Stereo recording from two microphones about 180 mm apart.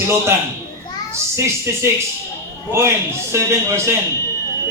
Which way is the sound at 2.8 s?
15° right (ahead or behind).